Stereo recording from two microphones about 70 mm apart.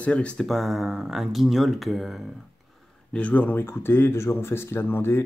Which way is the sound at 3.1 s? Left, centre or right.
Centre.